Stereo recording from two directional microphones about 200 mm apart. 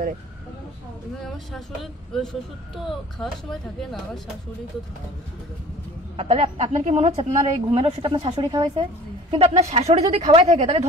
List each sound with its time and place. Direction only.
1.2 s speech: centre (ahead or behind)
6.1 s a woman's voice: 30° right (ahead or behind)